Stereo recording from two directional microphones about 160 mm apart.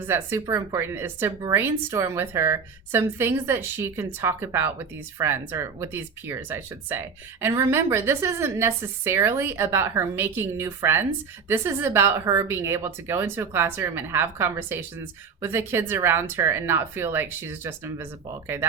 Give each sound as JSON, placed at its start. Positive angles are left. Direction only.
{"t": 0.1, "sound": "speech", "side_deg": -20}